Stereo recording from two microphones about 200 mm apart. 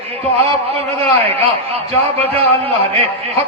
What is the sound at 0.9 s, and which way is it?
Speech, 30° right (ahead or behind).